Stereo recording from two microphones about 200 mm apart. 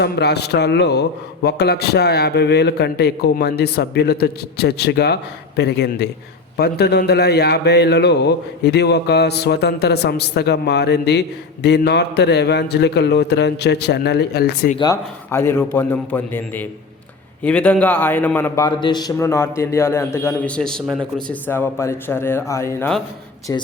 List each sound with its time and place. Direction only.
0.0 s a man's voice: 55° left (ahead or behind)
14.8 s a man's voice: 15° left (ahead or behind)
18.6 s a man's voice: 20° left (ahead or behind)